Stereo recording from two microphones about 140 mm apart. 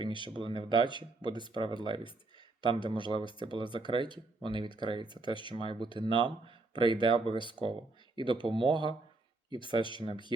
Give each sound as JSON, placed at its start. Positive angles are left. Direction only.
{"t": 0.0, "sound": "speech", "side_deg": -35}
{"t": 1.3, "sound": "speech", "side_deg": 35}
{"t": 1.8, "sound": "speech", "side_deg": -35}
{"t": 5.2, "sound": "speech", "side_deg": 35}
{"t": 5.5, "sound": "speech", "side_deg": -35}